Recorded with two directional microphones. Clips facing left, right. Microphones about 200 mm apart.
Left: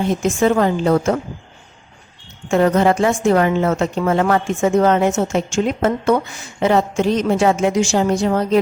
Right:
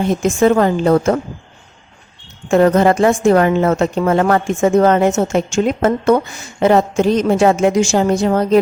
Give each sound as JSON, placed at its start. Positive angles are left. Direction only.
{"t": 0.4, "sound": "a woman's voice", "side_deg": -50}
{"t": 2.5, "sound": "a woman's voice", "side_deg": -50}